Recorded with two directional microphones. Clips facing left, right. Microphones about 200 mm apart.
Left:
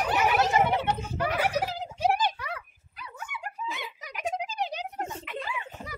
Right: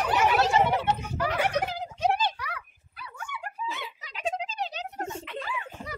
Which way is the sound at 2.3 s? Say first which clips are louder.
Left 1 dB; 25° left (ahead or behind).